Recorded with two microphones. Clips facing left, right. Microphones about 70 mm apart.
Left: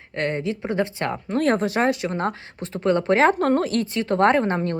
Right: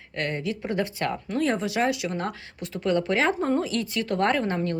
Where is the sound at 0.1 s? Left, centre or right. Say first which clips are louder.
Left 4 dB; left.